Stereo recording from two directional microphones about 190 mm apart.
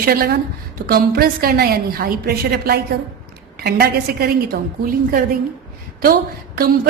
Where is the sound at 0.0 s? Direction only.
50° right (ahead or behind).